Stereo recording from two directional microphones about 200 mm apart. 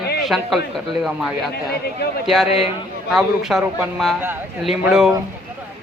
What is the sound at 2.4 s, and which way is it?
Speech, 30° left (ahead or behind).